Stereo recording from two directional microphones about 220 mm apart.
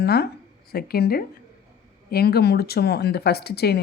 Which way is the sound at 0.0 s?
45° left (ahead or behind).